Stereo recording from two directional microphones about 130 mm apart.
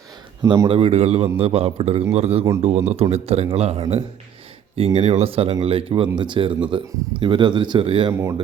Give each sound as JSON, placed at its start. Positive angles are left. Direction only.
{"t": 0.4, "sound": "speech", "side_deg": -30}
{"t": 0.7, "sound": "a man's voice", "side_deg": -50}